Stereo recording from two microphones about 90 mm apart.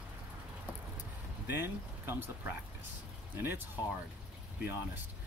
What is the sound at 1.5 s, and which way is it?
Speech, 25° right (ahead or behind).